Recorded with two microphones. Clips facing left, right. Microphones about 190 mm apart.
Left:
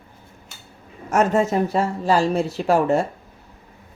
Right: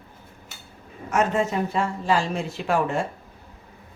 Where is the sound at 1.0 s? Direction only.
45° left (ahead or behind).